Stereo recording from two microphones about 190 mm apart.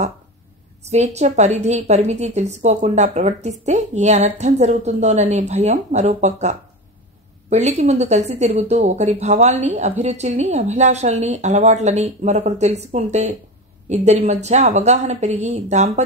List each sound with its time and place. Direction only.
0.8 s speech: 35° right (ahead or behind)